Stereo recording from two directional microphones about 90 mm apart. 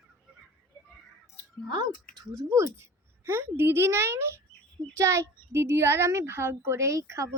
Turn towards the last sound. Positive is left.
turn(degrees=-35)  # may be behind; listen again after turning